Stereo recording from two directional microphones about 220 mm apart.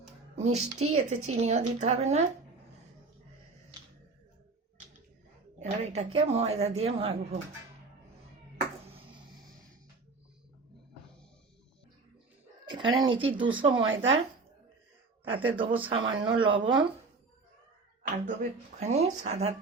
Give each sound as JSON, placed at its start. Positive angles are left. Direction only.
{"t": 0.5, "sound": "a woman's voice", "side_deg": -30}
{"t": 5.5, "sound": "speech", "side_deg": -30}
{"t": 12.6, "sound": "speech", "side_deg": -20}
{"t": 13.8, "sound": "speech", "side_deg": -60}
{"t": 15.4, "sound": "speech", "side_deg": -25}
{"t": 18.0, "sound": "a woman's voice", "side_deg": -35}